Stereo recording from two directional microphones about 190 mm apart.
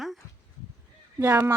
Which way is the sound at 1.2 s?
10° right (ahead or behind).